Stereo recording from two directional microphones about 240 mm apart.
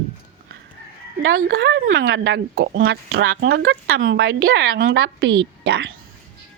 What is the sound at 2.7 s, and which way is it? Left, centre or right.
Speech, right.